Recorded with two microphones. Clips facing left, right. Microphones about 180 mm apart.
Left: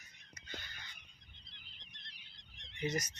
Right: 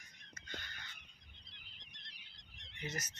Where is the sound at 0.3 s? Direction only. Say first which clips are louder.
Even; 10° left (ahead or behind).